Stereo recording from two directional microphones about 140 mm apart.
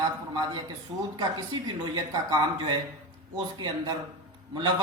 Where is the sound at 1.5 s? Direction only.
30° right (ahead or behind).